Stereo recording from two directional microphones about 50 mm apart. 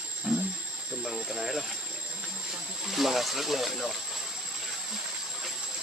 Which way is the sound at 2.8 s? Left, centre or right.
Centre.